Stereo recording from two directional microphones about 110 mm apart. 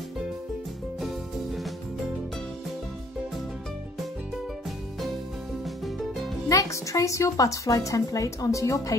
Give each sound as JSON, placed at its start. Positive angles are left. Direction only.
{"t": 6.5, "sound": "a woman's voice", "side_deg": 30}